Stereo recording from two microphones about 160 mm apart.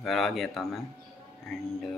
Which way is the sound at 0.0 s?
Centre (ahead or behind).